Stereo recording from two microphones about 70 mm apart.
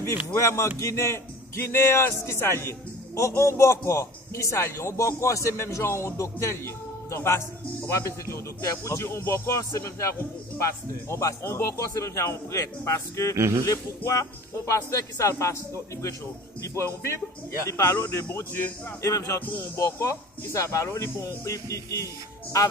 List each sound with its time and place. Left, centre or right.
0.3 s a man's voice: left
8.8 s a man's voice: left
11.1 s a man's voice: left
13.4 s speech: right
13.7 s a man's voice: left
19.0 s a man's voice: left